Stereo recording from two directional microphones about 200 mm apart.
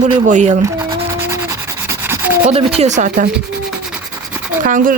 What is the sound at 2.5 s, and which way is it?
Speech, 30° right (ahead or behind).